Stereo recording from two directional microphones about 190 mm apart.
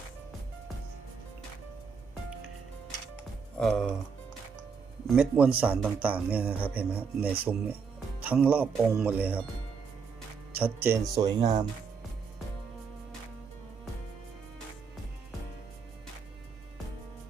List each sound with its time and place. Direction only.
3.6 s speech: 5° left (ahead or behind)
5.0 s a man's voice: 5° right (ahead or behind)
10.5 s a man's voice: 10° right (ahead or behind)
11.3 s speech: 35° right (ahead or behind)